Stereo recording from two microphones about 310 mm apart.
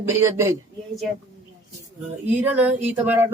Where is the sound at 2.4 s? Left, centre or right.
Centre.